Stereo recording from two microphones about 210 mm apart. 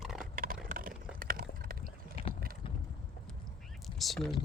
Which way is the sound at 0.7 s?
40° right (ahead or behind).